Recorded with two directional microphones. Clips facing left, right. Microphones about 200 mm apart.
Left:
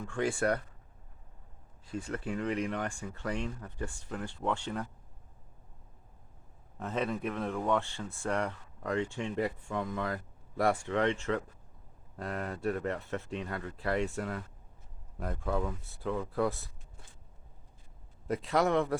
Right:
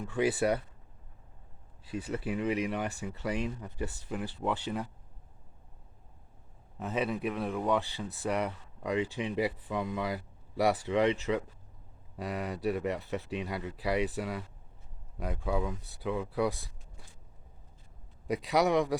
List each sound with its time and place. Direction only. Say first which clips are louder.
0.1 s speech: right 2 dB; 5° right (ahead or behind)
1.9 s speech: right 2 dB; 5° right (ahead or behind)
6.7 s speech: right 1 dB; 5° right (ahead or behind)
18.6 s speech: right 1 dB; 15° right (ahead or behind)